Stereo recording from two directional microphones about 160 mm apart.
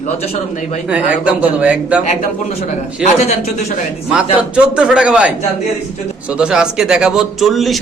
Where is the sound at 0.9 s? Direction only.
10° right (ahead or behind).